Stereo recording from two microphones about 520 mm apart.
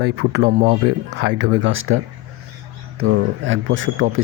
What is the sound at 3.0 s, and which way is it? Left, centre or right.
Speech, right.